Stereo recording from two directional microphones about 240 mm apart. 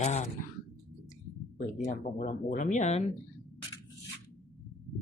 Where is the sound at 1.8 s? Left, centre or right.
Left.